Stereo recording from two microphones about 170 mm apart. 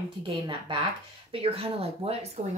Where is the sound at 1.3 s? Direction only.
35° right (ahead or behind).